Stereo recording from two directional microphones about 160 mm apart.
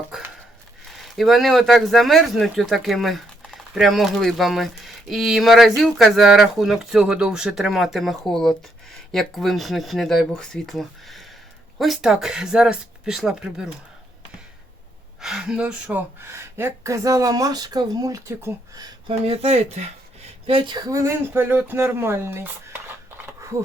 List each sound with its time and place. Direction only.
0.9 s speech: centre (ahead or behind)
15.2 s speech: 5° right (ahead or behind); by 18.9 s 20° right (ahead or behind)
19.0 s speech: 35° right (ahead or behind); by 22.4 s 15° right (ahead or behind)